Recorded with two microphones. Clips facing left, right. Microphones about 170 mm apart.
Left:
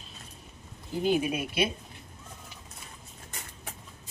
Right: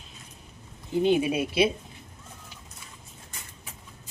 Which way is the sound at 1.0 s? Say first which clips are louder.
Right 3 dB; 25° right (ahead or behind).